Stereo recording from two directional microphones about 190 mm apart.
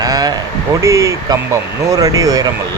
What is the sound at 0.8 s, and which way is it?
Speech, 15° right (ahead or behind).